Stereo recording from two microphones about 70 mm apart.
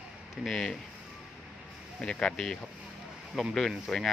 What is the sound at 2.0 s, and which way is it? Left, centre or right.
Speech, centre.